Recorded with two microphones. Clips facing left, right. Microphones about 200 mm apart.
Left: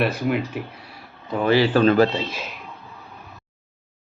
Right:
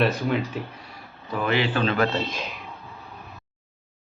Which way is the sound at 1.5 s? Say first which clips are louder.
Left 7 dB; 35° left (ahead or behind).